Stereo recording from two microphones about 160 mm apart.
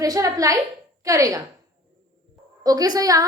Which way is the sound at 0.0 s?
20° right (ahead or behind).